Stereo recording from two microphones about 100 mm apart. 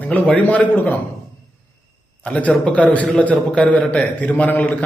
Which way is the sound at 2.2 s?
15° left (ahead or behind).